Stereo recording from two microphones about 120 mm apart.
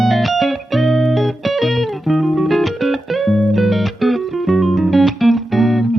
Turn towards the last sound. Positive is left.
turn(degrees=0)  # may be behind; listen again after turning